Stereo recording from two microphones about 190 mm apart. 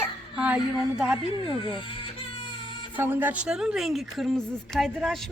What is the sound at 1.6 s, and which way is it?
Speech, 25° left (ahead or behind).